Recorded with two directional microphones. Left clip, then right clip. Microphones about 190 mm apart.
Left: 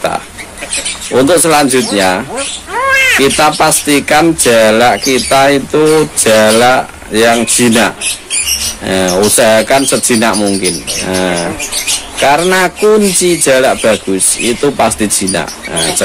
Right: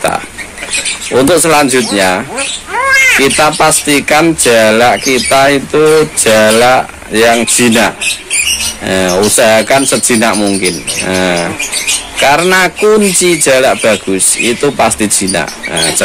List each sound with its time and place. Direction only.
1.1 s speech: centre (ahead or behind)